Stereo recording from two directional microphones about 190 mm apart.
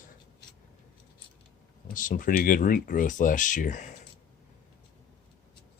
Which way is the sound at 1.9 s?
45° left (ahead or behind).